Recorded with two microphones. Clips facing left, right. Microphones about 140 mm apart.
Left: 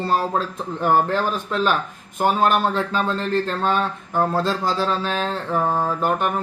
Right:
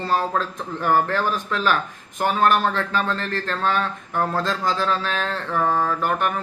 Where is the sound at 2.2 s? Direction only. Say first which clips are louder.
Left 1 dB; 15° left (ahead or behind).